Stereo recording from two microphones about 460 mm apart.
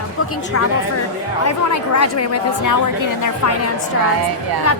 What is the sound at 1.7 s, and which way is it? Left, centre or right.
A woman's voice, left.